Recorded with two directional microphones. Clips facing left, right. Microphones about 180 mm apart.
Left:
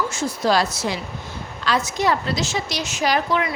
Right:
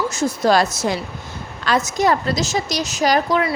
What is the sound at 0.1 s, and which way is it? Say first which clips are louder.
A woman's voice: right 4 dB; 45° right (ahead or behind).